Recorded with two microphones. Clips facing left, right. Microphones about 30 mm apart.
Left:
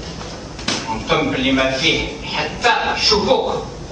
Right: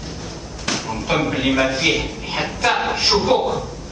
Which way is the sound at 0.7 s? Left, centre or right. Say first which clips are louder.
Left 2 dB; centre.